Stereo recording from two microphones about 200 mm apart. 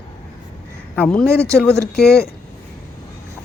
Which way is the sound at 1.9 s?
50° left (ahead or behind).